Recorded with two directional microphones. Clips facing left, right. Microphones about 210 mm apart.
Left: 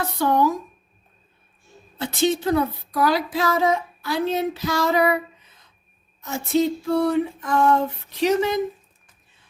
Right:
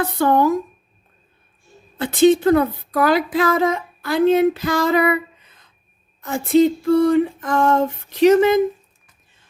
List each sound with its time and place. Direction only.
0.0 s speech: 55° right (ahead or behind)
2.0 s speech: 55° right (ahead or behind)
6.2 s a sound: 55° right (ahead or behind)